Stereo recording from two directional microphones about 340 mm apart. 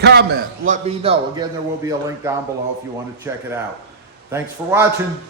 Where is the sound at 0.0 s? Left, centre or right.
Right.